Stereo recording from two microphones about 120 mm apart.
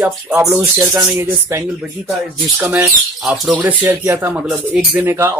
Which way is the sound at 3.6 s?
15° right (ahead or behind).